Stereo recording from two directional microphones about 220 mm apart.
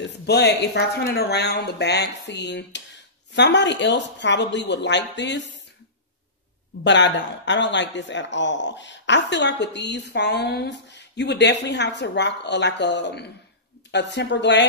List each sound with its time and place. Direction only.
0.3 s a man's voice: 50° left (ahead or behind)
6.8 s a man's voice: 55° left (ahead or behind)